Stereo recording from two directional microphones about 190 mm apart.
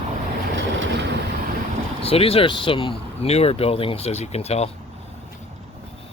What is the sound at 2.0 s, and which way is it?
Speech, 30° left (ahead or behind).